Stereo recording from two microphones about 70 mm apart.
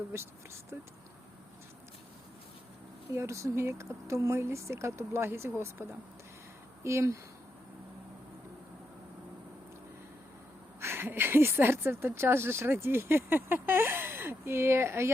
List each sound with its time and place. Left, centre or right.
0.1 s speech: right
3.1 s speech: right
10.8 s speech: right